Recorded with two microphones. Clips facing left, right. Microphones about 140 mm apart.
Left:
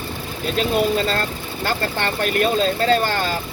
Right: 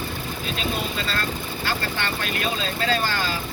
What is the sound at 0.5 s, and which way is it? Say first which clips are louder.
Speech: left 10 dB; 40° left (ahead or behind).